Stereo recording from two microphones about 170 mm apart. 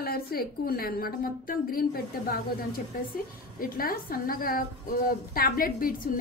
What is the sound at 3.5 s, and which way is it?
A woman's voice, 55° left (ahead or behind).